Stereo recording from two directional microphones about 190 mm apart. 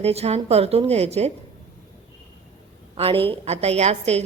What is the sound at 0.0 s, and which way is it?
Speech, 35° right (ahead or behind).